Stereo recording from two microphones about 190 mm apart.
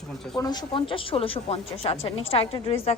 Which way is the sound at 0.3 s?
20° left (ahead or behind).